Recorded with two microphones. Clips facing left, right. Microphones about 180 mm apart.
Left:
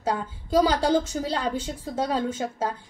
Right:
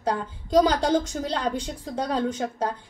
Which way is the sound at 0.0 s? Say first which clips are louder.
Right 1 dB; 5° left (ahead or behind).